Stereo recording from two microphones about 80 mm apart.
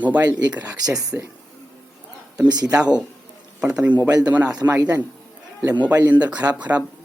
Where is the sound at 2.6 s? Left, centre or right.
Centre.